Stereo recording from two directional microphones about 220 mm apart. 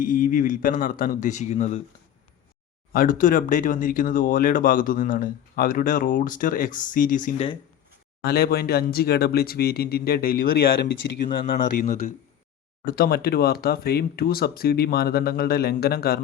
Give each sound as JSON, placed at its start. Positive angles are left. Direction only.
{"t": 0.0, "sound": "speech", "side_deg": 40}
{"t": 2.9, "sound": "speech", "side_deg": 40}